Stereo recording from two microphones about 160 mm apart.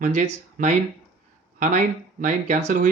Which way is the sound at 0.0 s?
50° right (ahead or behind).